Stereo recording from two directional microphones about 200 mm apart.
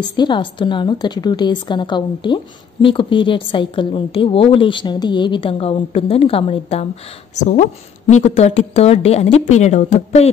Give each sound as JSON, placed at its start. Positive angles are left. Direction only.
{"t": 0.1, "sound": "a woman's voice", "side_deg": 20}
{"t": 8.1, "sound": "a woman's voice", "side_deg": 35}